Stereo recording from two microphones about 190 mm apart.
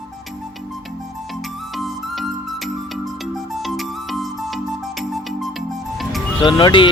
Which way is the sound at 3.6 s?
Centre (ahead or behind).